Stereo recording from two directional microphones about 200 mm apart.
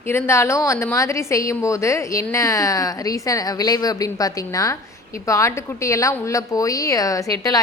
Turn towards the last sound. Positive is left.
turn(degrees=15)  # may be behind; listen again after turning